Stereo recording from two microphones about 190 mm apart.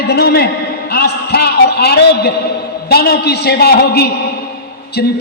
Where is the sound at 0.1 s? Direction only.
55° left (ahead or behind).